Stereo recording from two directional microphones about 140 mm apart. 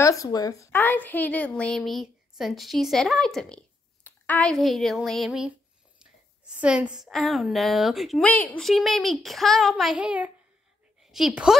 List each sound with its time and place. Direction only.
0.0 s speech: 25° left (ahead or behind)
0.7 s a woman's voice: 15° left (ahead or behind)
8.3 s speech: 10° left (ahead or behind)
8.6 s a woman's voice: centre (ahead or behind)